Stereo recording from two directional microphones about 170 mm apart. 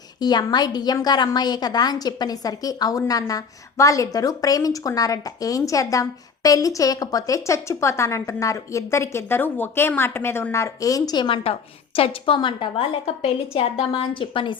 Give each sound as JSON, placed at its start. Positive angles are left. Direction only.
{"t": 0.2, "sound": "a woman's voice", "side_deg": 25}